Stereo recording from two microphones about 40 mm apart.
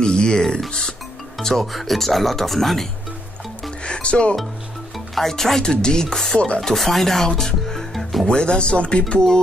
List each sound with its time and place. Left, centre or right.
0.0 s a sound: centre
0.7 s speech: centre
1.4 s speech: centre
3.8 s speech: left
4.9 s speech: centre
5.6 s speech: centre
6.3 s speech: left
6.6 s speech: centre
7.9 s music: centre
8.3 s speech: left